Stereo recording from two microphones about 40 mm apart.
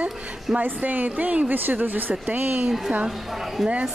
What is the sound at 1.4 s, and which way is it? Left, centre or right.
Speech, right.